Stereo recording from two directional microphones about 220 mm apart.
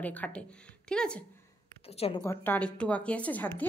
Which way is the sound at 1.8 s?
25° left (ahead or behind).